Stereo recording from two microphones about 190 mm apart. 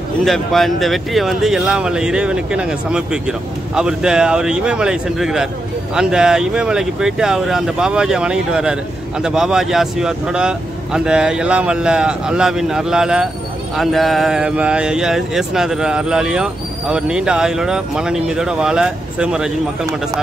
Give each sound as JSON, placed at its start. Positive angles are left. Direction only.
{"t": 0.2, "sound": "speech", "side_deg": 0}